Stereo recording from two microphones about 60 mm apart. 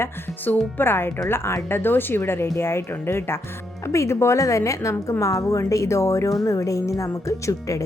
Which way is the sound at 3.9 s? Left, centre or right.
Left.